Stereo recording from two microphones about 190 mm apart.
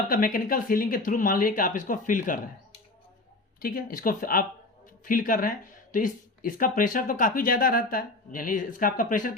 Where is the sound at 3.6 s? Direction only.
50° left (ahead or behind).